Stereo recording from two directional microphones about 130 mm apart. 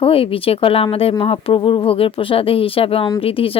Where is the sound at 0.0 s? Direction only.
45° left (ahead or behind).